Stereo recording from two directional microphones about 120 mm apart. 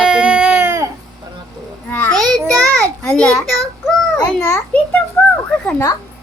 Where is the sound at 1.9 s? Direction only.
15° left (ahead or behind).